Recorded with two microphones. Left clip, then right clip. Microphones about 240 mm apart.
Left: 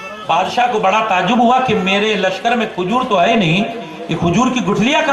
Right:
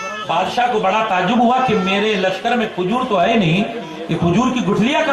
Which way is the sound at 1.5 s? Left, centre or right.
Centre.